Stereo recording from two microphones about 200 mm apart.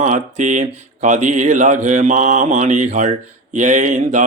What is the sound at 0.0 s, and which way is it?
Speech, 35° right (ahead or behind).